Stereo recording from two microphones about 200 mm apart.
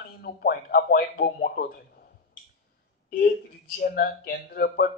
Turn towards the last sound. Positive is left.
turn(degrees=50)  # may be behind; listen again after turning